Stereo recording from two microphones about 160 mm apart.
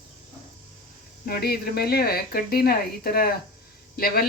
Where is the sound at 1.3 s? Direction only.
75° left (ahead or behind).